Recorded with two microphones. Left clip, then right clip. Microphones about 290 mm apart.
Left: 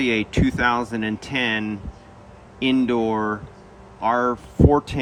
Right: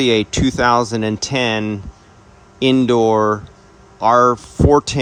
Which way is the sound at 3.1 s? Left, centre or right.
Left.